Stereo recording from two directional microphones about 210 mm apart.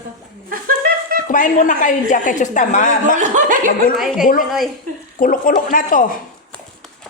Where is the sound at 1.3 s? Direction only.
40° left (ahead or behind).